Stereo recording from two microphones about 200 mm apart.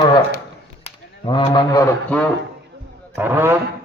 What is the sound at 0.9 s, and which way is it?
Cattle, 25° left (ahead or behind).